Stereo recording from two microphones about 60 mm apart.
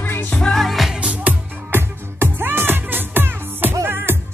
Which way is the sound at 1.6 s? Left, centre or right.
Right.